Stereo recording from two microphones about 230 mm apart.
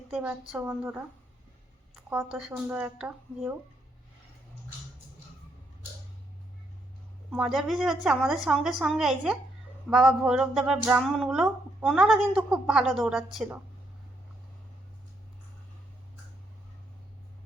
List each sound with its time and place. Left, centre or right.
0.1 s a woman's voice: centre
2.0 s speech: centre
7.3 s speech: centre